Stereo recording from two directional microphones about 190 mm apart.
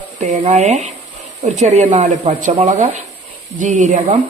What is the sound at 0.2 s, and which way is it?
Speech, 35° right (ahead or behind).